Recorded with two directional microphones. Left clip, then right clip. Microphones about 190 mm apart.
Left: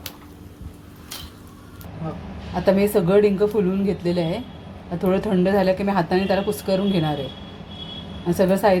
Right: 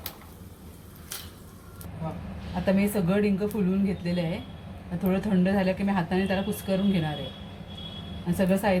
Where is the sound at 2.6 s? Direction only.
30° left (ahead or behind).